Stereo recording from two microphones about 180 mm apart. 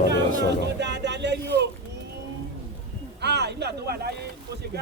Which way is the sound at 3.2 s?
70° right (ahead or behind).